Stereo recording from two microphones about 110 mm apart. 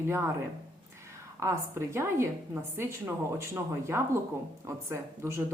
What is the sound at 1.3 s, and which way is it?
A woman's voice, 25° right (ahead or behind).